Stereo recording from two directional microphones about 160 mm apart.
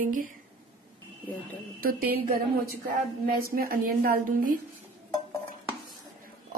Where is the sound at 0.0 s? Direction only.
55° right (ahead or behind).